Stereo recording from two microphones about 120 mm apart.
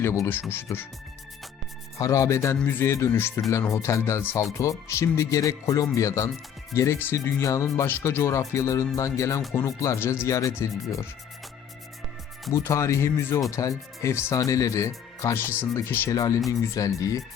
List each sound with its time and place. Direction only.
0.0 s speech: 20° left (ahead or behind)
2.0 s speech: 30° left (ahead or behind)
12.5 s speech: 25° left (ahead or behind)